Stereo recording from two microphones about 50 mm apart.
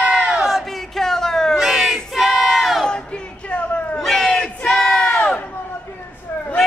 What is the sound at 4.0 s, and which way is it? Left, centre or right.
Crowd, centre.